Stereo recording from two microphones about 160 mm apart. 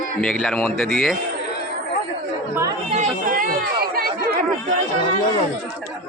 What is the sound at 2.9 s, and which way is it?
Chatter, 55° right (ahead or behind).